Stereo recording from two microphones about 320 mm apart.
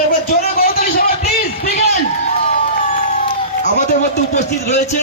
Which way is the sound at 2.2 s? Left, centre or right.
Left.